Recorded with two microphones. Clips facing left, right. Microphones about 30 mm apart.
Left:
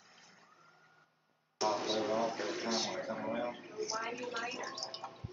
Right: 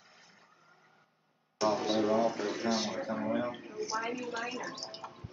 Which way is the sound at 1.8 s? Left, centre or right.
Centre.